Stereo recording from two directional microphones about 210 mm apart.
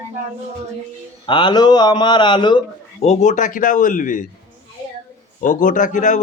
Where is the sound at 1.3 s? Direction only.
20° left (ahead or behind); by 4.2 s 40° left (ahead or behind).